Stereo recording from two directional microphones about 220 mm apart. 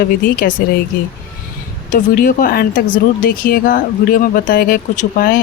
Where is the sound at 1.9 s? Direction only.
40° left (ahead or behind).